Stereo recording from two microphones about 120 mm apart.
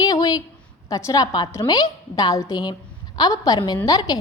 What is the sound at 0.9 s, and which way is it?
A woman's voice, 30° left (ahead or behind).